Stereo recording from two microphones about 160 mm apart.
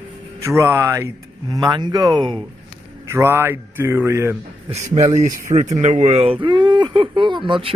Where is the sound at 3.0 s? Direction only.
15° right (ahead or behind).